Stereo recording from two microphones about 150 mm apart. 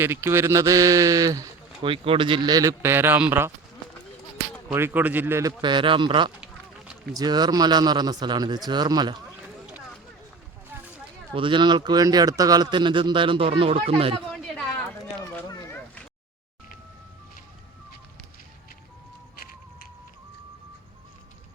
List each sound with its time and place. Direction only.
0.0 s speech: 15° right (ahead or behind)
1.8 s speech: 35° right (ahead or behind); by 3.5 s 15° right (ahead or behind)
4.7 s speech: 15° right (ahead or behind)
11.3 s speech: 35° right (ahead or behind)
14.5 s a sound: 5° left (ahead or behind)
15.4 s a sound: 25° left (ahead or behind)